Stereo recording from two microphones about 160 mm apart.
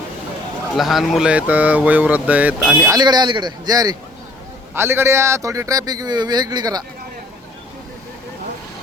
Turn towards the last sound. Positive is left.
turn(degrees=-25)  # may be behind; listen again after turning